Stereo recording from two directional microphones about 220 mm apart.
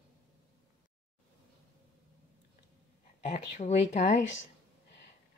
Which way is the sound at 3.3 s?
35° left (ahead or behind).